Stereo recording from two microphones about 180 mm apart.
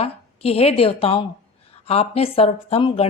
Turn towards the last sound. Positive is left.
turn(degrees=30)  # may be behind; listen again after turning